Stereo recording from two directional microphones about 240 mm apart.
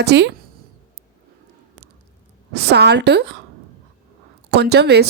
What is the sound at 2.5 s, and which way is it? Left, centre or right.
Speech, right.